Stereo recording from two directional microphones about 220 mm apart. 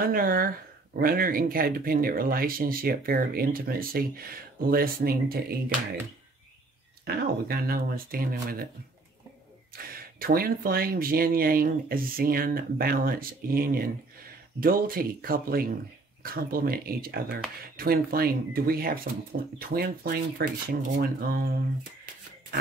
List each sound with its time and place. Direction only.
0.0 s speech: 40° right (ahead or behind)
7.1 s speech: 45° right (ahead or behind)
9.8 s speech: 40° right (ahead or behind)